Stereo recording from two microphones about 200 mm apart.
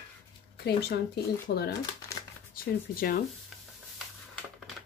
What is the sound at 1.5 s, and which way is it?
Speech, 50° left (ahead or behind).